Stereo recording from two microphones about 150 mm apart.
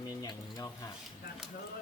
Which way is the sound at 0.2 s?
25° left (ahead or behind).